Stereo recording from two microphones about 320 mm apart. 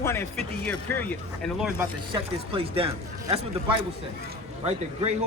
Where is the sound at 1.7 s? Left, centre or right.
Centre.